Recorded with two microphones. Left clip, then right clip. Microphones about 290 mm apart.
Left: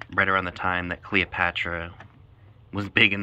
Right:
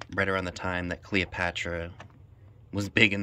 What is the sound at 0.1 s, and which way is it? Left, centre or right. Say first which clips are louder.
Speech: left 6 dB; centre.